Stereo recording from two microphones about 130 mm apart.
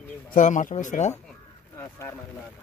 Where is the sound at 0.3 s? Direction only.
80° left.